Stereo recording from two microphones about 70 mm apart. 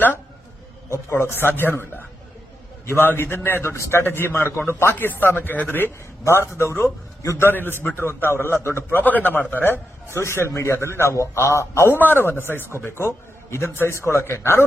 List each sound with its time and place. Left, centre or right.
1.1 s a man's voice: left
7.3 s a man's voice: left
11.9 s a man's voice: left